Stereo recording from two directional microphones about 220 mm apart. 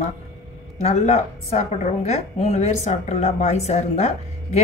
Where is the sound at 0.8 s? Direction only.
30° left (ahead or behind).